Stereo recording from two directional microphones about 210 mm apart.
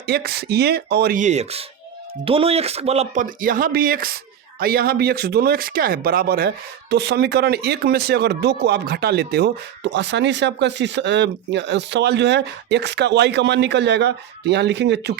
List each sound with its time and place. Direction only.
0.0 s speech: 50° right (ahead or behind)